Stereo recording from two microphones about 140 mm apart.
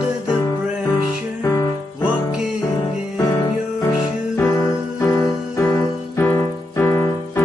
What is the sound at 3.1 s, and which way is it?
Music, 20° left (ahead or behind).